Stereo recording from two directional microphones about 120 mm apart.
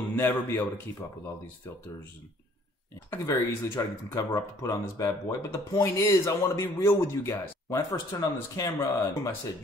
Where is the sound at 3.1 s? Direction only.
25° left (ahead or behind).